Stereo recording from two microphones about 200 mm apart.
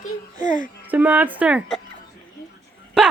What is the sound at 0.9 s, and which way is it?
Speech, 10° right (ahead or behind).